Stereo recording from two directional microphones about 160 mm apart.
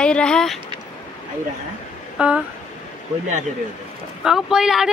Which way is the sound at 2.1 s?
5° right (ahead or behind).